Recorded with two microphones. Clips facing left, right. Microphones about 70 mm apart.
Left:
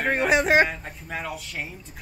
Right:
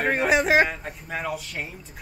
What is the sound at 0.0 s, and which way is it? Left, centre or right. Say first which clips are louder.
Speech: even; centre.